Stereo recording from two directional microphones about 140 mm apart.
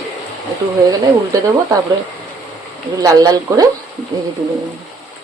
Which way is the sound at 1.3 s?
25° right (ahead or behind).